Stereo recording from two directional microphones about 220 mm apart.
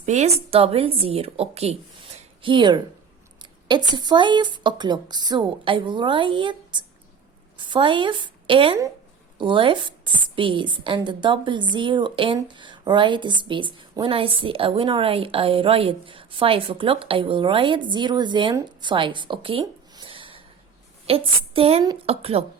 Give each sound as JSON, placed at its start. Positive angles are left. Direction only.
{"t": 0.0, "sound": "a woman's voice", "side_deg": -30}